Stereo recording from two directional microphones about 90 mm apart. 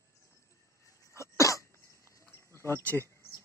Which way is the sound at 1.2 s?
35° left (ahead or behind).